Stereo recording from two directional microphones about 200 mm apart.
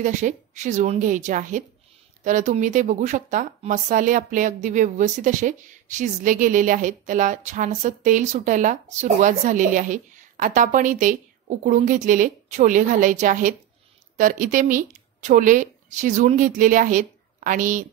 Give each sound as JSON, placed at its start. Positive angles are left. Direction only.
{"t": 0.0, "sound": "speech", "side_deg": -40}